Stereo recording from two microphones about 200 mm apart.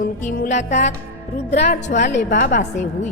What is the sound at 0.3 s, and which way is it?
Music, 40° left (ahead or behind).